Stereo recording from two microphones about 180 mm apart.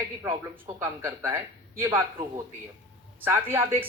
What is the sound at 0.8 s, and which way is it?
Speech, 15° right (ahead or behind).